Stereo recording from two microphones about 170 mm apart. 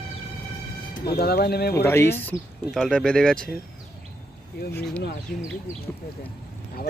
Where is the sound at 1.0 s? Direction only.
65° left (ahead or behind).